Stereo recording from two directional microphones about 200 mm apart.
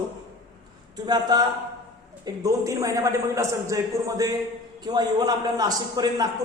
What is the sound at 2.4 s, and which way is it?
A woman's voice, 15° right (ahead or behind).